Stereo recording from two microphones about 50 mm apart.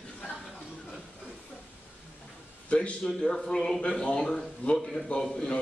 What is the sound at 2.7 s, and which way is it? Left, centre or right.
A man's voice, left.